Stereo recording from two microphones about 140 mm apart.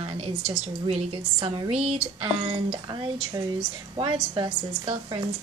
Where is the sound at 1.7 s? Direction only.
5° right (ahead or behind).